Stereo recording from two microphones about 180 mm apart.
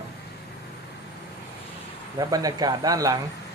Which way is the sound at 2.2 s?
20° right (ahead or behind).